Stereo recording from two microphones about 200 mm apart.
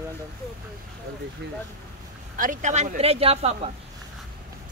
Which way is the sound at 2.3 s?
40° right (ahead or behind).